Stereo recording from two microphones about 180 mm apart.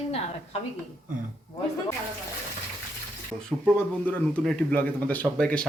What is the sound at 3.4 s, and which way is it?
Speech, 5° left (ahead or behind).